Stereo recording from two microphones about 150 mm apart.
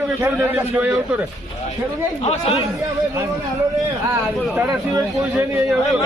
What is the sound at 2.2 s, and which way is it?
Speech, 45° left (ahead or behind).